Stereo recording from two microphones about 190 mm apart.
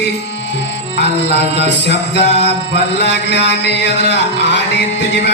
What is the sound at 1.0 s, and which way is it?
Mantra, 65° left (ahead or behind).